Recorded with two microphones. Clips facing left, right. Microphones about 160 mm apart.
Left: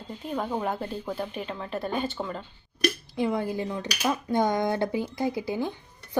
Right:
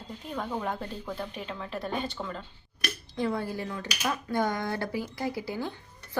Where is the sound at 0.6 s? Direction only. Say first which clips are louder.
Left 4 dB; 5° left (ahead or behind).